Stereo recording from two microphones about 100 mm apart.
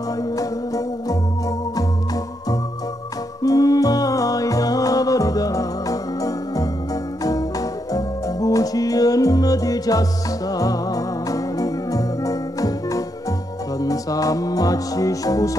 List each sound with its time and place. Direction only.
0.4 s music: 35° left (ahead or behind)
3.4 s music: 35° left (ahead or behind)
7.9 s music: 35° left (ahead or behind)